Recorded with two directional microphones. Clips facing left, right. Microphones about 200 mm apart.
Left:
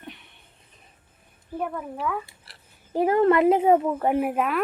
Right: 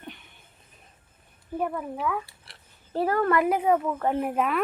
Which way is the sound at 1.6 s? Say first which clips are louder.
Right 1 dB; centre (ahead or behind).